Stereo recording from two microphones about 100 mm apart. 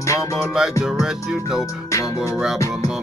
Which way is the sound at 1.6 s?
30° left (ahead or behind).